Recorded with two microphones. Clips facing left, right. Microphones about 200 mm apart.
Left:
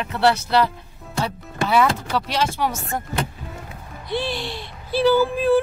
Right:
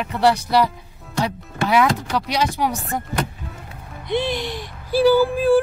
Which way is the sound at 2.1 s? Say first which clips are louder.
Right 1 dB; 15° right (ahead or behind).